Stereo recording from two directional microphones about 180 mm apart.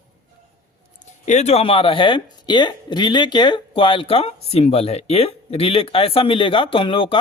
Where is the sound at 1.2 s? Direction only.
40° left (ahead or behind).